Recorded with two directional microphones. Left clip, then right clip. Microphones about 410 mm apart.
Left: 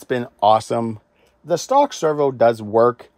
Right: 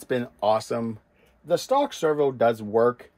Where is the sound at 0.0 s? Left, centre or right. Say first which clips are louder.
Left 7 dB; centre.